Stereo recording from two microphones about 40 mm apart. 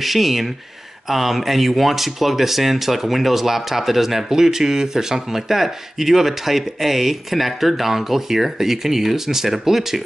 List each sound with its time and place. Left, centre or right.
0.0 s speech: centre